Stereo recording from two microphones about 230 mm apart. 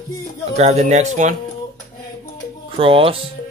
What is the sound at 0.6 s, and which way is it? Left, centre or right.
Speech, right.